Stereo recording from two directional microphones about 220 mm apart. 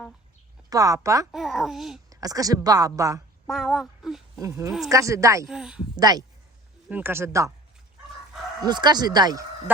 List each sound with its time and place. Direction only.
0.7 s a woman's voice: 15° right (ahead or behind)
1.3 s a child's voice: centre (ahead or behind)
2.0 s a woman's voice: 15° right (ahead or behind)
3.5 s a child's voice: centre (ahead or behind)
4.4 s a woman's voice: 15° right (ahead or behind)
5.5 s a child's voice: centre (ahead or behind)
6.0 s a woman's voice: 15° right (ahead or behind)
8.6 s speech: 20° right (ahead or behind)